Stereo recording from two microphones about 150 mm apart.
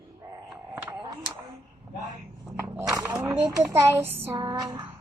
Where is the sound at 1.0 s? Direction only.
25° right (ahead or behind).